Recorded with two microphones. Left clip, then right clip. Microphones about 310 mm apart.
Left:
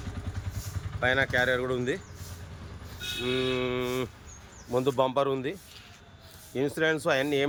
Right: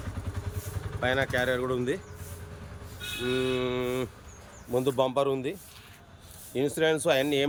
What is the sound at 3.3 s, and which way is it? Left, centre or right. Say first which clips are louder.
Speech: even; centre.